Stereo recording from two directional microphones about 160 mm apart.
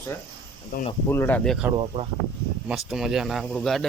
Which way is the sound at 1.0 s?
15° left (ahead or behind).